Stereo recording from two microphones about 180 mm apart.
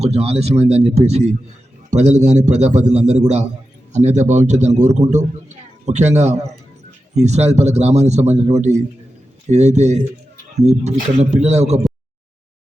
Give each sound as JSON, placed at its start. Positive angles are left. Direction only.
{"t": 0.0, "sound": "a man's voice", "side_deg": -35}